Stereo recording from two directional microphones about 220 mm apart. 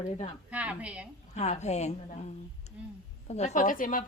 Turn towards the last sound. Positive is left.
turn(degrees=40)  # may be behind; listen again after turning